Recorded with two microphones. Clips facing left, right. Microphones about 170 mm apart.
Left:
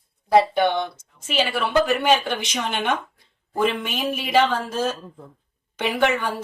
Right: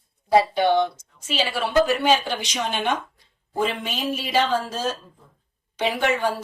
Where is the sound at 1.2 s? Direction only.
55° left (ahead or behind).